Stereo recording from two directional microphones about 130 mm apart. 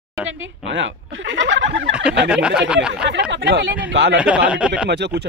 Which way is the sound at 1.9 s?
10° right (ahead or behind).